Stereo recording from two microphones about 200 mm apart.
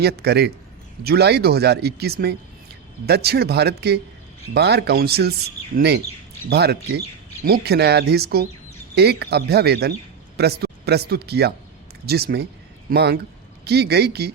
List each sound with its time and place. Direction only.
0.0 s speech: 55° right (ahead or behind)